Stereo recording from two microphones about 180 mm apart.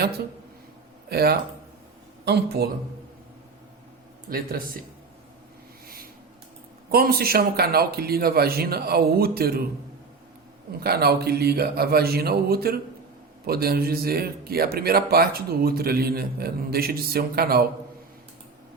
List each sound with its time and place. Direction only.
1.1 s speech: 60° right (ahead or behind)
4.3 s speech: 55° right (ahead or behind)
6.9 s speech: 55° right (ahead or behind)
10.7 s speech: 60° right (ahead or behind)